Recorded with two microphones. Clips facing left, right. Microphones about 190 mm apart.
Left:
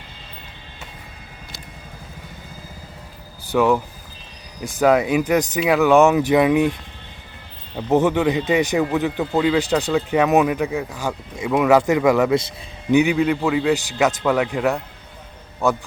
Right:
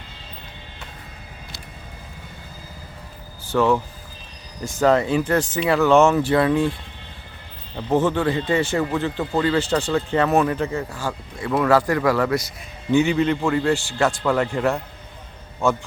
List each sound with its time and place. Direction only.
3.5 s speech: 15° left (ahead or behind)
7.8 s speech: 15° left (ahead or behind)
13.1 s a man's voice: centre (ahead or behind)